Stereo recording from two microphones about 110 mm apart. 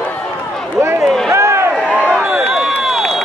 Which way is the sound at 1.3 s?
25° right (ahead or behind).